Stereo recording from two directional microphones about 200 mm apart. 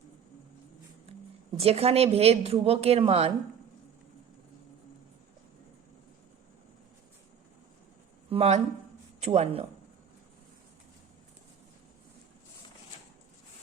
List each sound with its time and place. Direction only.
1.5 s a woman's voice: 30° right (ahead or behind)
8.3 s a woman's voice: 30° right (ahead or behind)